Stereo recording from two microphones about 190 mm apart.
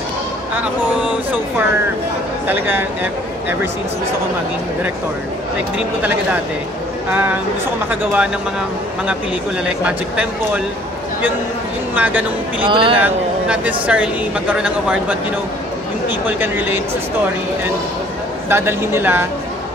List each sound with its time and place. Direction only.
2.4 s speech: 10° right (ahead or behind)
7.1 s speech: 5° right (ahead or behind)
9.8 s speech: 5° right (ahead or behind)
11.9 s speech: 10° right (ahead or behind)
12.6 s a man's voice: 25° right (ahead or behind)
13.0 s speech: 10° right (ahead or behind)
18.5 s speech: 10° right (ahead or behind)